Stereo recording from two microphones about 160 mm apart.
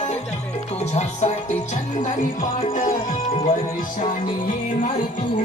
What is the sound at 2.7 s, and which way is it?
Music, 60° left (ahead or behind).